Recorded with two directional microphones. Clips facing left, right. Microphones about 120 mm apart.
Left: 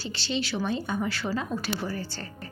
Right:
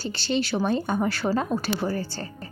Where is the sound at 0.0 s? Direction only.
45° right (ahead or behind).